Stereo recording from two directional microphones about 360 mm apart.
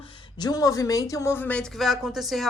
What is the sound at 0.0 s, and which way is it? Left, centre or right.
Speech, centre.